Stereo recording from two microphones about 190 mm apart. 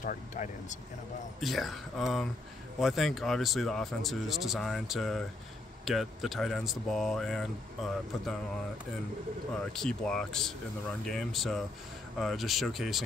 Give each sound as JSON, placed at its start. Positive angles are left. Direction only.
{"t": 0.0, "sound": "speech", "side_deg": 45}
{"t": 1.4, "sound": "speech", "side_deg": 0}
{"t": 9.7, "sound": "speech", "side_deg": 5}